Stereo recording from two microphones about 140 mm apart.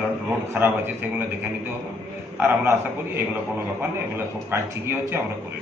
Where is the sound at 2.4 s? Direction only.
15° right (ahead or behind).